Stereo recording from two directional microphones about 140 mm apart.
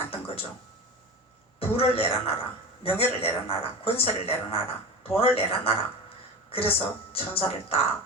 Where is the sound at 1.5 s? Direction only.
45° left (ahead or behind).